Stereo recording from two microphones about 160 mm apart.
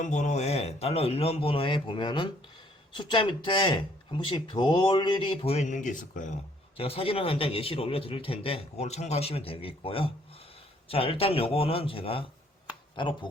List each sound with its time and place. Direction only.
0.0 s speech: 45° left (ahead or behind)
6.7 s speech: 35° left (ahead or behind)